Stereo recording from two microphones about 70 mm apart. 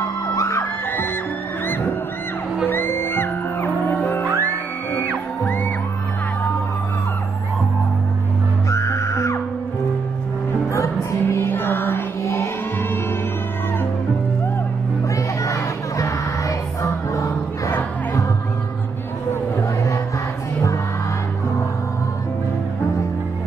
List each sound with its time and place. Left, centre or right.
0.4 s music: left
2.7 s music: left
8.6 s music: left
10.7 s music: left
11.4 s music: left
12.2 s music: left
15.1 s crowd: left